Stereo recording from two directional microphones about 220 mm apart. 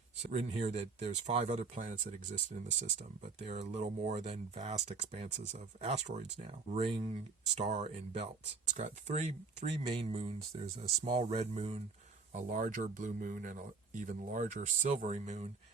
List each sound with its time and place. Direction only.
0.2 s speech: 30° right (ahead or behind)